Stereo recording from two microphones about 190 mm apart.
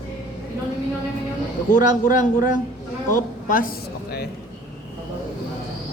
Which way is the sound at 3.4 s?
45° left (ahead or behind).